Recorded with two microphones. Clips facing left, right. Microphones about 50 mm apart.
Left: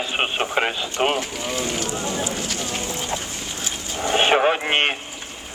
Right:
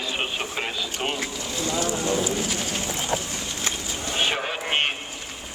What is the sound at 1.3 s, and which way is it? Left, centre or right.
Speech, left.